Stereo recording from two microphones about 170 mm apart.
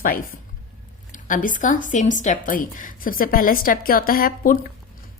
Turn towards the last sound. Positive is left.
turn(degrees=55)  # may be behind; listen again after turning